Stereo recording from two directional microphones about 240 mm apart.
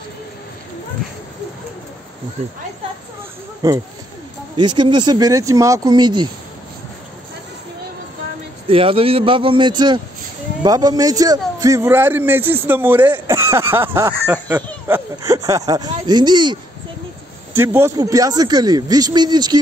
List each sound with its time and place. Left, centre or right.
3.6 s a man's voice: centre
8.6 s a man's voice: right
17.6 s a man's voice: centre